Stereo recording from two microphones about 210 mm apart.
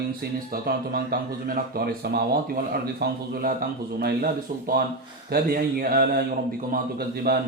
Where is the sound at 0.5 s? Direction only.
45° right (ahead or behind).